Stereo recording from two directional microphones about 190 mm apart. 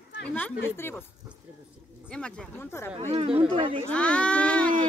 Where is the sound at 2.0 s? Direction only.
5° left (ahead or behind).